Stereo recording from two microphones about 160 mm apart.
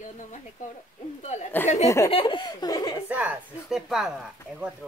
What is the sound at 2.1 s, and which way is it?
Laughter, 30° left (ahead or behind).